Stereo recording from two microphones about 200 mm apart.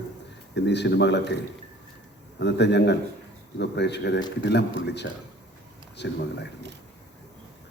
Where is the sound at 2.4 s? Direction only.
60° left (ahead or behind).